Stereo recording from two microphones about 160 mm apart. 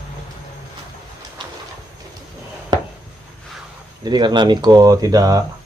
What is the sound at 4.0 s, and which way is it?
Speech, 30° right (ahead or behind).